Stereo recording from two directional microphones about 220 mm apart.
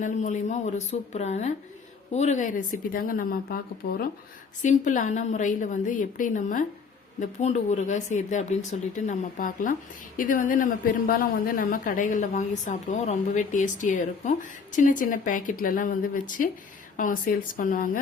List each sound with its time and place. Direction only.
0.0 s a woman's voice: 35° left (ahead or behind)